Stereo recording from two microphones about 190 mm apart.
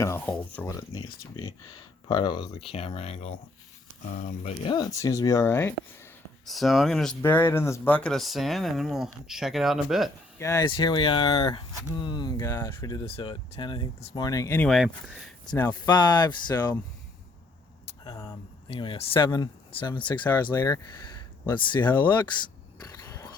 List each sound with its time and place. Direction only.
0.0 s speech: 10° left (ahead or behind); by 4.7 s 35° left (ahead or behind)
4.7 s speech: 20° left (ahead or behind)
6.4 s speech: centre (ahead or behind)
10.3 s speech: 15° left (ahead or behind)
14.7 s speech: centre (ahead or behind)
15.9 s speech: 20° left (ahead or behind)
18.0 s a sound: 15° left (ahead or behind)
18.7 s speech: 30° left (ahead or behind)
20.3 s speech: 10° left (ahead or behind)
21.8 s speech: 10° left (ahead or behind)
22.9 s a sound: 15° left (ahead or behind)